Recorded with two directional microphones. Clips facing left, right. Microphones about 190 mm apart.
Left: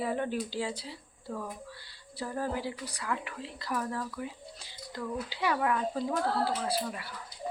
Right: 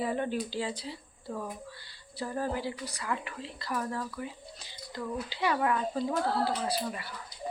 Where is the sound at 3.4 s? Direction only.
15° left (ahead or behind).